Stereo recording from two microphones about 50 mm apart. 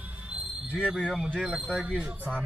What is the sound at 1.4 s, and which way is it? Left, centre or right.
Speech, right.